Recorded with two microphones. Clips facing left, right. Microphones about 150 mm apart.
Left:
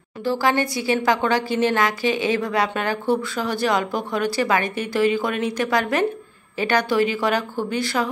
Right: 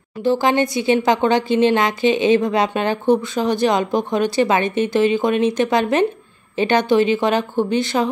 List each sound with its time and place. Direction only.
0.2 s speech: 20° right (ahead or behind)